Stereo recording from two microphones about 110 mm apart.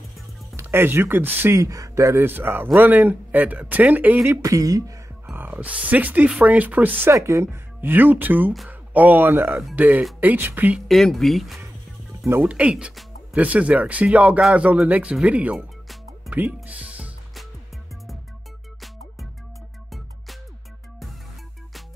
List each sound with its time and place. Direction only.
0.6 s speech: 20° right (ahead or behind)
5.3 s speech: 15° right (ahead or behind)
10.9 s speech: centre (ahead or behind)
12.3 s speech: 15° right (ahead or behind)
15.5 s music: centre (ahead or behind)
16.3 s music: 15° right (ahead or behind)